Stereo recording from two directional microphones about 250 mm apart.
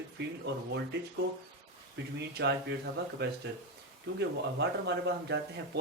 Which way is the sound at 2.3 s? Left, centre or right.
Right.